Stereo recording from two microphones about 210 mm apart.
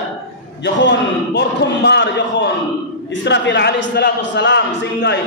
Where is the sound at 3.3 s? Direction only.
55° left (ahead or behind).